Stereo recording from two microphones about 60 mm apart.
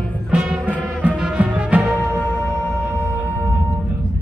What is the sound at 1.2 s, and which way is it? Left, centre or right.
Music, centre.